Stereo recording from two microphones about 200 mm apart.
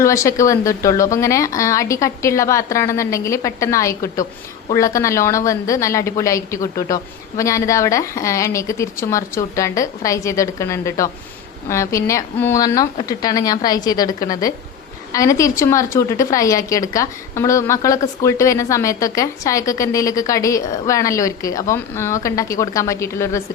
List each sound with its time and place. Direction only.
0.0 s a woman's voice: 15° left (ahead or behind)